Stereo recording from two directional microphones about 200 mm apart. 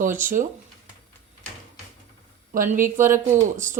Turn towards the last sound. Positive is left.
turn(degrees=-40)  # may be behind; listen again after turning